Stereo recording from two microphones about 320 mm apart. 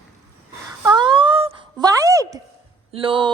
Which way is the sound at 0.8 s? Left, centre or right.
Centre.